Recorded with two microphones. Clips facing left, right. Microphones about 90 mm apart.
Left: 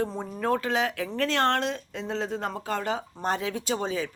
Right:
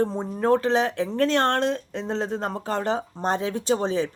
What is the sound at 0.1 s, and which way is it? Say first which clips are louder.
Speech: right 6 dB; 25° right (ahead or behind).